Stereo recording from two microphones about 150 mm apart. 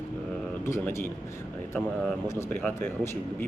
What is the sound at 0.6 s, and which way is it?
Speech, 15° left (ahead or behind).